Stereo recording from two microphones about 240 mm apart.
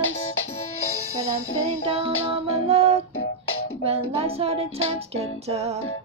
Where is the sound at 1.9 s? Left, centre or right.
Right.